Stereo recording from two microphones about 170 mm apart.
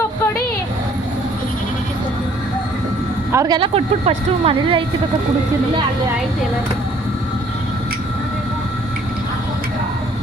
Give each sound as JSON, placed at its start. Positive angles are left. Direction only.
{"t": 3.3, "sound": "speech", "side_deg": -25}